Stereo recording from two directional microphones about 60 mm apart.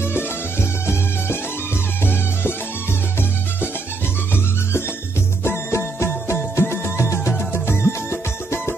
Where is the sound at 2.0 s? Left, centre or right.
Left.